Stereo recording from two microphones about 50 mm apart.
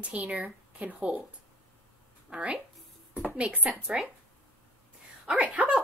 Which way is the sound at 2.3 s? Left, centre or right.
Right.